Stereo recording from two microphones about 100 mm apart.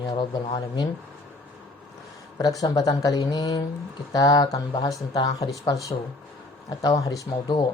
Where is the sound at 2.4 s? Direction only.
35° left (ahead or behind).